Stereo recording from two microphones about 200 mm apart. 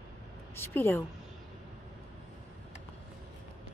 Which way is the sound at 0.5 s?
10° left (ahead or behind).